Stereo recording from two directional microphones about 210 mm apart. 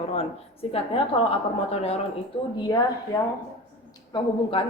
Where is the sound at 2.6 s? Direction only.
20° left (ahead or behind).